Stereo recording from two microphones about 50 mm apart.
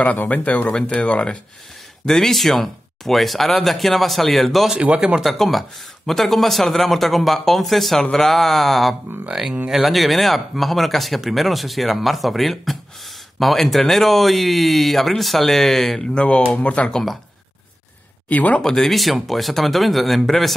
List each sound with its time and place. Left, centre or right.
0.0 s speech: left
2.0 s speech: centre
4.7 s speech: right
5.2 s speech: centre
9.3 s speech: centre
16.2 s speech: left
18.3 s speech: left
18.6 s speech: centre